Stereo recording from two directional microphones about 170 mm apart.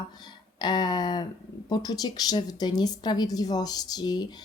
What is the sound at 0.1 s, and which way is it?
A woman's voice, 25° left (ahead or behind).